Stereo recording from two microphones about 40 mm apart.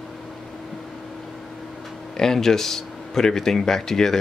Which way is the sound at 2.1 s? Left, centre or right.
Centre.